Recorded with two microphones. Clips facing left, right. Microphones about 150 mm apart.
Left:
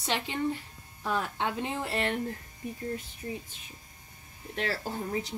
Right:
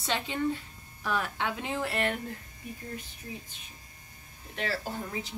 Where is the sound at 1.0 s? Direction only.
25° left (ahead or behind).